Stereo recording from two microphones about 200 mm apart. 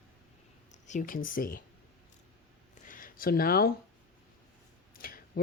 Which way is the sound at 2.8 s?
40° left (ahead or behind).